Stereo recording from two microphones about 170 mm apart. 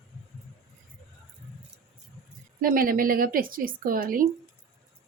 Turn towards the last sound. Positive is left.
turn(degrees=-55)  # may be behind; listen again after turning